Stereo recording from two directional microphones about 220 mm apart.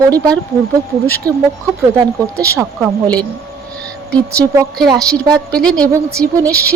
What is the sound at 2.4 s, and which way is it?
Speech, 10° right (ahead or behind).